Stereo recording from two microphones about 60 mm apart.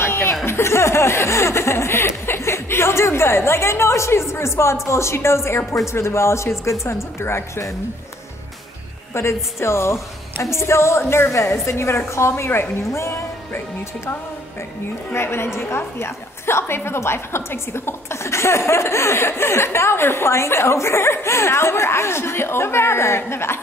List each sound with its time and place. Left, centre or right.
0.0 s a sound: left
0.5 s chuckle: left
4.8 s a woman's voice: left
9.1 s a woman's voice: left
15.1 s a woman's voice: left